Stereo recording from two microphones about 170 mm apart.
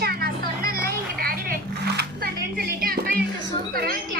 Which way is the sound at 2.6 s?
60° right (ahead or behind).